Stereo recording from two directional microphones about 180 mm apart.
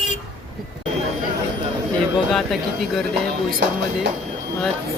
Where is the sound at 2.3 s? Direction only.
Centre (ahead or behind).